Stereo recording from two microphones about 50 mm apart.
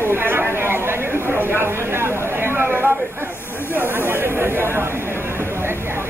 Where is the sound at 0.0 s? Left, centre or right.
Right.